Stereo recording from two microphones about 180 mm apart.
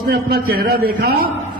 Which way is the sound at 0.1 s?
60° right (ahead or behind).